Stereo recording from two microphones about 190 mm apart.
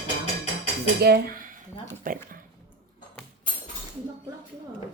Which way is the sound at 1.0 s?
50° right (ahead or behind).